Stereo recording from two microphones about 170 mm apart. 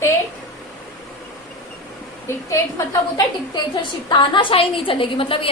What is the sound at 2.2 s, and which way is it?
A woman's voice, 15° left (ahead or behind).